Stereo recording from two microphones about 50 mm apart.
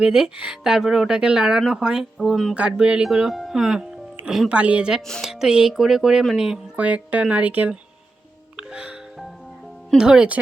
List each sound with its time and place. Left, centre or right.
0.0 s speech: centre
2.2 s speech: centre
2.6 s speech: right
4.4 s speech: right
5.2 s speech: centre
6.7 s speech: right
8.5 s music: right
10.0 s speech: centre